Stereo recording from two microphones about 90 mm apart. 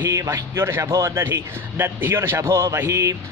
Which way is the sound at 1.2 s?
25° right (ahead or behind).